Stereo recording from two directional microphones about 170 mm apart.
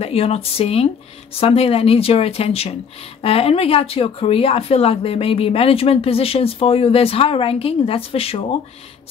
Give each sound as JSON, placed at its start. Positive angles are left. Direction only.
{"t": 0.0, "sound": "speech", "side_deg": 35}